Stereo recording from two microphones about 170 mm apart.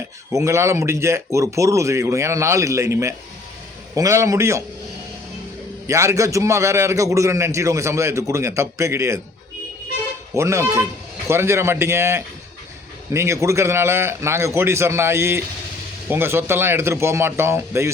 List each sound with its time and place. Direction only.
0.3 s a man's voice: 15° right (ahead or behind)
5.9 s a man's voice: 20° right (ahead or behind)
10.3 s a man's voice: 15° right (ahead or behind)